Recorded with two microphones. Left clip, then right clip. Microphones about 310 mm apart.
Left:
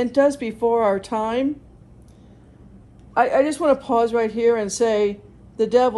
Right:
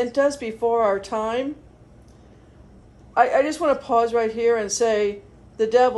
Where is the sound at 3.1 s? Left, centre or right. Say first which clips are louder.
Even; left.